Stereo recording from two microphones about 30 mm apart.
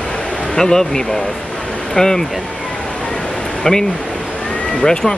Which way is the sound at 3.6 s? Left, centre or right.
Left.